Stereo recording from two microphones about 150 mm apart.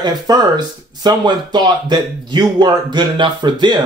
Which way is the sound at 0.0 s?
25° right (ahead or behind).